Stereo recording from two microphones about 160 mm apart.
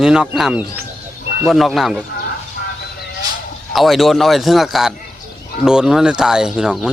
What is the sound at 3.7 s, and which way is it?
Speech, centre (ahead or behind).